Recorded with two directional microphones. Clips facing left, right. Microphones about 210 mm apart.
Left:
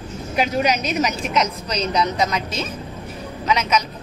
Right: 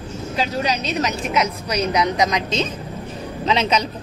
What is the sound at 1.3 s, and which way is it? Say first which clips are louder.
A woman's voice: right 1 dB; 10° right (ahead or behind).